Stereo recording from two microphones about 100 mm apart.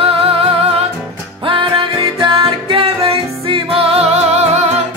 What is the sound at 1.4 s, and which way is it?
Music, 55° right (ahead or behind).